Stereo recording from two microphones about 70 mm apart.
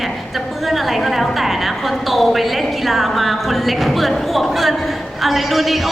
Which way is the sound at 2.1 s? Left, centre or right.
Centre.